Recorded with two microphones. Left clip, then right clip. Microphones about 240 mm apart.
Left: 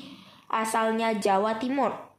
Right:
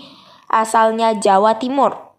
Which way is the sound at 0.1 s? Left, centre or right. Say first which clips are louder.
Right 12 dB; right.